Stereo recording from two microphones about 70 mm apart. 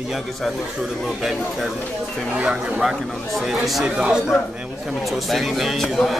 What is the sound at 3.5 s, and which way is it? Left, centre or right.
Speech, centre.